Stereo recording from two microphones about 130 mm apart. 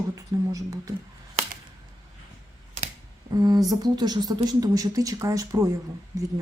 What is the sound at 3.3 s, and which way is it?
Speech, 30° right (ahead or behind).